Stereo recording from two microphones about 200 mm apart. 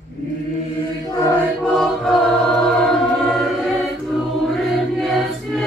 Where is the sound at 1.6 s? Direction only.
Centre (ahead or behind).